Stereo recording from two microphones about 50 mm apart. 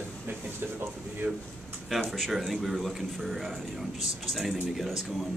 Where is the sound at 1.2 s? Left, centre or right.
Right.